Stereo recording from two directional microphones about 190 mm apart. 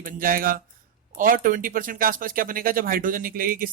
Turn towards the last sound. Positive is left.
turn(degrees=-50)  # may be behind; listen again after turning